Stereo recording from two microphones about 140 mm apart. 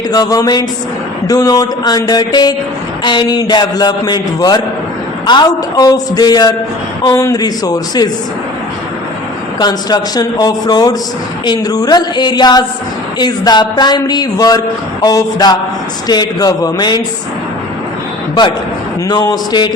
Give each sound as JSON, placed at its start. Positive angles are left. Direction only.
{"t": 0.1, "sound": "a man's voice", "side_deg": 25}
{"t": 9.6, "sound": "speech", "side_deg": 30}
{"t": 19.0, "sound": "speech", "side_deg": 25}